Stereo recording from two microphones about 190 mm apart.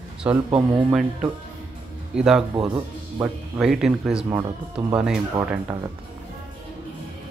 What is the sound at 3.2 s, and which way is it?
A man's voice, 5° right (ahead or behind).